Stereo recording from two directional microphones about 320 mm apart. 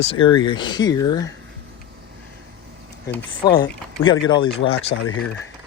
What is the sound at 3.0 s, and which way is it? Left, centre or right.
Speech, centre.